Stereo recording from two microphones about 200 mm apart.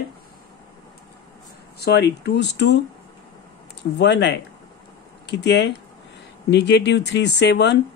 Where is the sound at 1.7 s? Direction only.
55° left (ahead or behind).